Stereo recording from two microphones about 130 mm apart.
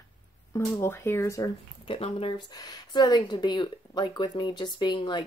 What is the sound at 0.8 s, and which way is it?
Speech, 20° left (ahead or behind).